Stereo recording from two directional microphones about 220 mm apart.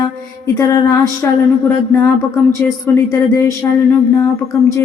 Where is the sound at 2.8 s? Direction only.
15° left (ahead or behind).